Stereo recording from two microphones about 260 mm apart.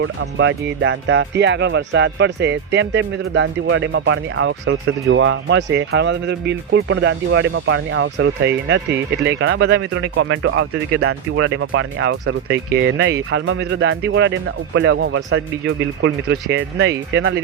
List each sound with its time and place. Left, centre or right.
0.0 s speech: right